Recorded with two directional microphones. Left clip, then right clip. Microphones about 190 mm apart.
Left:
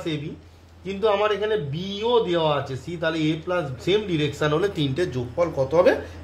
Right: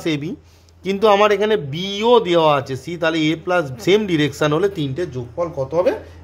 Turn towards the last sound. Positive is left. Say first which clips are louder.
# even
turn(degrees=-20)  # may be behind; listen again after turning